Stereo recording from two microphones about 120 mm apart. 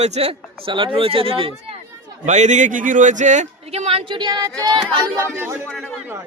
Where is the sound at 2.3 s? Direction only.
80° right; by 4.1 s 55° right (ahead or behind).